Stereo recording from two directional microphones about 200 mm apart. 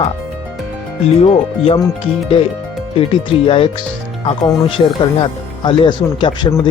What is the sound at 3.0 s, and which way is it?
Speech, 25° left (ahead or behind).